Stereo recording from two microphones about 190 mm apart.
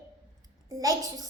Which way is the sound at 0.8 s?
20° right (ahead or behind).